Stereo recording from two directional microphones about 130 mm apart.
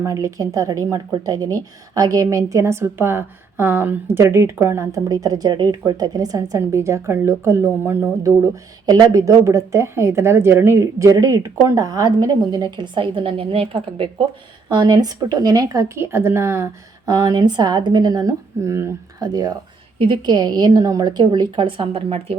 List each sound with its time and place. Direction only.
0.0 s a woman's voice: 25° right (ahead or behind); by 14.1 s 45° right (ahead or behind)
14.7 s a woman's voice: 35° right (ahead or behind)
17.1 s speech: 30° right (ahead or behind)